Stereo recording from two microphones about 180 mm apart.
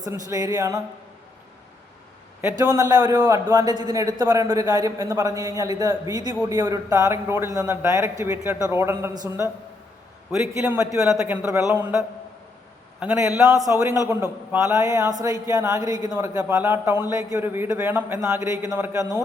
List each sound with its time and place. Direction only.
0.0 s a man's voice: 20° right (ahead or behind)
2.4 s a man's voice: 15° right (ahead or behind)
10.4 s a man's voice: 15° right (ahead or behind)